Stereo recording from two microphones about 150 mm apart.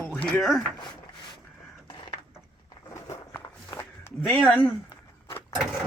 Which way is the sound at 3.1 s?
20° left (ahead or behind).